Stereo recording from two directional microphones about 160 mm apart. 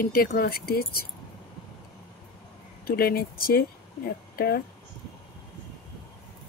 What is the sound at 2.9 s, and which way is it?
Speech, 70° left (ahead or behind).